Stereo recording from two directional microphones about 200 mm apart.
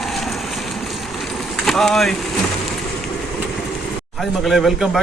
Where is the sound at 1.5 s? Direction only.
Centre (ahead or behind).